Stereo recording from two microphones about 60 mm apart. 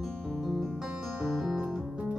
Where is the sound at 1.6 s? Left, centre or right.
Centre.